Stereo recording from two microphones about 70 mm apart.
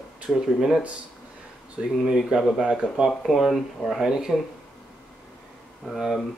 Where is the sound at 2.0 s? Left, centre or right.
Centre.